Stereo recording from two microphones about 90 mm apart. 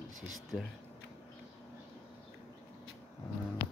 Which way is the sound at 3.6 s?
90° left.